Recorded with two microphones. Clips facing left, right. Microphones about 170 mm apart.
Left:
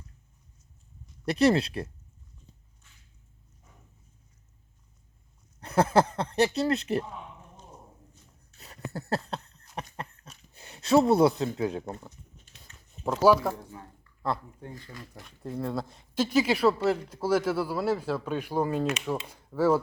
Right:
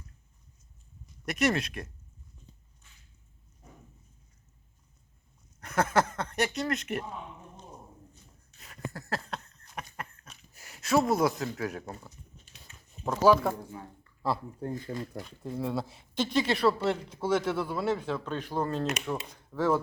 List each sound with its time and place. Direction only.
1.2 s speech: 30° left (ahead or behind)
5.5 s speech: 30° left (ahead or behind)
8.6 s a sound: 35° left (ahead or behind)
11.5 s speech: 25° left (ahead or behind)
13.1 s speech: 10° left (ahead or behind)
13.5 s speech: 10° right (ahead or behind)
14.9 s speech: 55° right (ahead or behind)
15.4 s speech: centre (ahead or behind)